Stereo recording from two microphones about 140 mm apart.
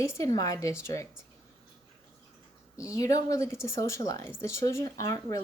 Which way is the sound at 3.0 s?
25° left (ahead or behind).